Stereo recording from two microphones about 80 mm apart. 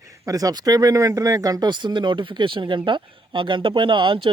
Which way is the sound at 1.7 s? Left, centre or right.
Right.